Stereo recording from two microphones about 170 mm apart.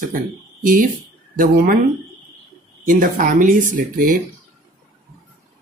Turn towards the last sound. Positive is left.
turn(degrees=-50)  # may be behind; listen again after turning